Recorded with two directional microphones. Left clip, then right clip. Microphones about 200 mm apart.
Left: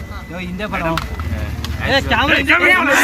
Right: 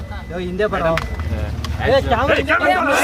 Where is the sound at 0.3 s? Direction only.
35° right (ahead or behind).